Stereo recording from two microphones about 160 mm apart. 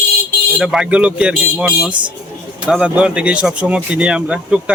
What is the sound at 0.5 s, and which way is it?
Speech, 5° right (ahead or behind).